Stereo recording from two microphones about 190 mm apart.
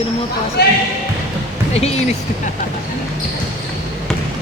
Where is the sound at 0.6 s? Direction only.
60° left (ahead or behind).